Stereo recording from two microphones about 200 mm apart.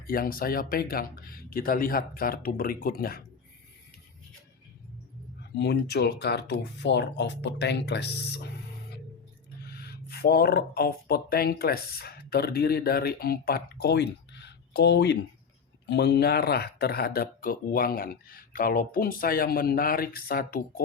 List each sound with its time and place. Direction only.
0.0 s speech: 45° left (ahead or behind)
5.5 s speech: 55° left (ahead or behind)
9.6 s speech: 50° left (ahead or behind)